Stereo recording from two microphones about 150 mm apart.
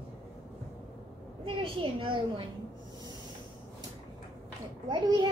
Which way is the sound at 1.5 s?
35° right (ahead or behind).